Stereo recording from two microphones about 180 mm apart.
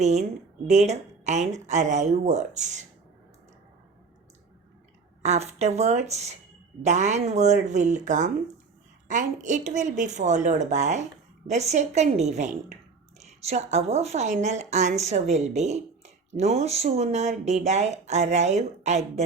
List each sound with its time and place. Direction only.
0.0 s a woman's voice: 40° right (ahead or behind)
5.2 s a woman's voice: 40° right (ahead or behind)